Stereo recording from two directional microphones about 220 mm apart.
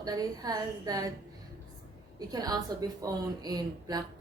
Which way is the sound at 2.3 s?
15° right (ahead or behind).